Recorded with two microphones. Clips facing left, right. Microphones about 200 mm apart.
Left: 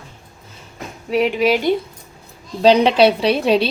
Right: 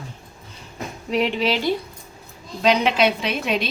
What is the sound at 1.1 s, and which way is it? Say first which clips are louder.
Speech: left 5 dB; 5° left (ahead or behind).